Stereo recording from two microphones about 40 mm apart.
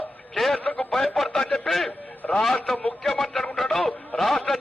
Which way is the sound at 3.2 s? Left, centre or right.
Centre.